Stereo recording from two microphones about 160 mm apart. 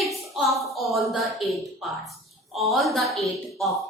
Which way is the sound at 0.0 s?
Centre (ahead or behind).